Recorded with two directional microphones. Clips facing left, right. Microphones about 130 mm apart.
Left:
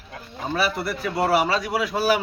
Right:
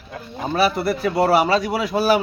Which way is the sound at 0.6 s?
30° right (ahead or behind).